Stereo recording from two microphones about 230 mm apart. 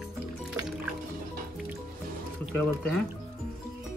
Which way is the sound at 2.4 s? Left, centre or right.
Centre.